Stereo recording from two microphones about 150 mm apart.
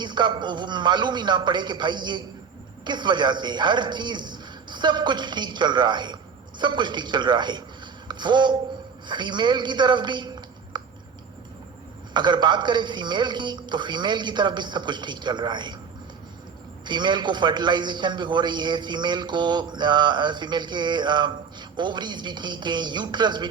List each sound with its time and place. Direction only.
0.0 s a man's voice: 30° right (ahead or behind)
8.0 s a sound: 30° right (ahead or behind)
9.0 s a man's voice: 30° right (ahead or behind)
12.1 s a man's voice: 30° right (ahead or behind)
16.8 s a man's voice: 30° right (ahead or behind)